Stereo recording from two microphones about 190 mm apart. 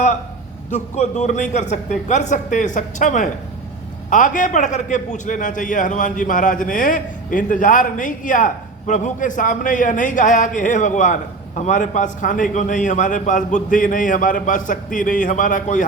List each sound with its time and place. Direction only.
0.7 s a man's voice: 40° left (ahead or behind)